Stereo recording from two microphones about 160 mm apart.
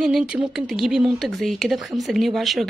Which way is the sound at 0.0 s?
5° right (ahead or behind).